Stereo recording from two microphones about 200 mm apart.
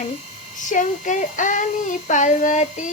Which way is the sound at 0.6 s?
40° left (ahead or behind).